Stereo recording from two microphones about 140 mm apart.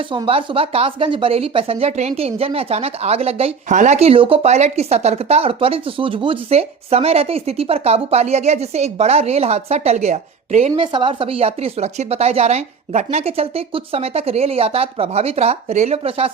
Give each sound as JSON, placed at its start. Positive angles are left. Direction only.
{"t": 0.0, "sound": "speech", "side_deg": -35}
{"t": 3.7, "sound": "speech", "side_deg": -60}
{"t": 10.9, "sound": "speech", "side_deg": -35}